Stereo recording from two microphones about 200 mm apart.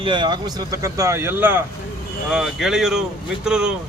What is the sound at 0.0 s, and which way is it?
A man's voice, 25° right (ahead or behind).